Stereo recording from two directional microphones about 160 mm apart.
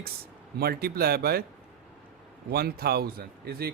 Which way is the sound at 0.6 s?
75° right (ahead or behind).